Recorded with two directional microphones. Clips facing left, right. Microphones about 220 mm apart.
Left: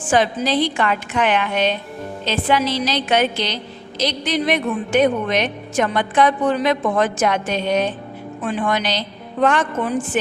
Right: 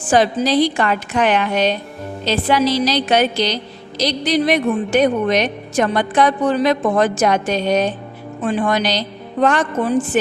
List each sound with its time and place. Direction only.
0.1 s a woman's voice: 40° right (ahead or behind)